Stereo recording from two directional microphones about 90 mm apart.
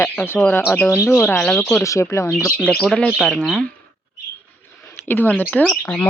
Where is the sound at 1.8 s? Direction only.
35° left (ahead or behind).